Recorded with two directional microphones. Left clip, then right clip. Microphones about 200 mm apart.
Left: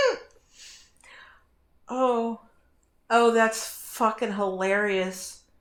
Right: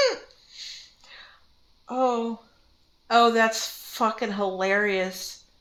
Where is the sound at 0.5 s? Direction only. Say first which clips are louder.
Right 10 dB; 10° right (ahead or behind).